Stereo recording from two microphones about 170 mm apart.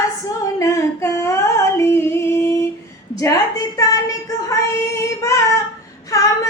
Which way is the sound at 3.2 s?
20° left (ahead or behind).